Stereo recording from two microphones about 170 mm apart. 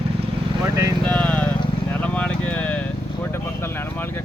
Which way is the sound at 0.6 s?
20° right (ahead or behind).